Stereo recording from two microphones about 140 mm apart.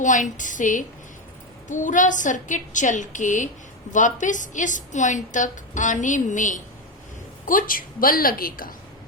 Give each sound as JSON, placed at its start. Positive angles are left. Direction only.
{"t": 0.0, "sound": "a woman's voice", "side_deg": 65}
{"t": 7.4, "sound": "a woman's voice", "side_deg": 80}